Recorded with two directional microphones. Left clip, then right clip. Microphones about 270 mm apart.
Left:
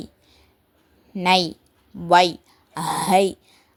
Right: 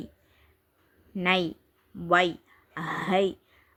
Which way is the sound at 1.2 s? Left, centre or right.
Left.